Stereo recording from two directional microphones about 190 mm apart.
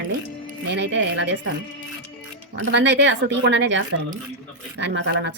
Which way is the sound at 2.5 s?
70° right (ahead or behind).